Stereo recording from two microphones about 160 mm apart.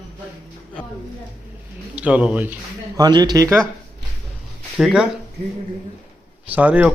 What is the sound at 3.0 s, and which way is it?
Speech, 25° right (ahead or behind).